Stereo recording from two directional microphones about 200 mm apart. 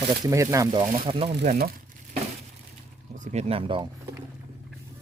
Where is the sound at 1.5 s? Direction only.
45° right (ahead or behind).